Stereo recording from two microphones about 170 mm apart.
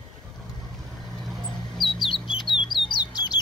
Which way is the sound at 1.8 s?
Centre (ahead or behind).